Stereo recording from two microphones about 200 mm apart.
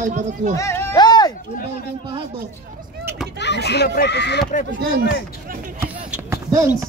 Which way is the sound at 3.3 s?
60° left (ahead or behind).